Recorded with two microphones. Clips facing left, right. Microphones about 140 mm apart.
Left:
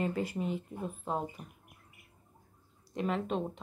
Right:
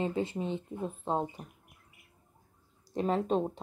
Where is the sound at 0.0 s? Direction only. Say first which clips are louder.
Right 1 dB; 25° right (ahead or behind).